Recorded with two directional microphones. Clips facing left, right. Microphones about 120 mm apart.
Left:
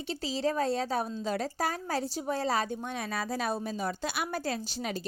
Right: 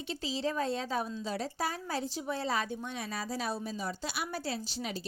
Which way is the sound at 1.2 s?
55° left (ahead or behind).